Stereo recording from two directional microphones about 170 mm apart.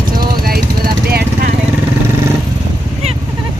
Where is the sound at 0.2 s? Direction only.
60° right (ahead or behind).